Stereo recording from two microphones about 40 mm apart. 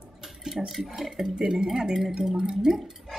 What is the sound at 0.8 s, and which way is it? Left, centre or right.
Speech, centre.